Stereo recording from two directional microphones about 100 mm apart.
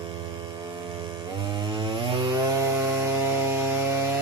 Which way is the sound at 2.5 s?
25° right (ahead or behind).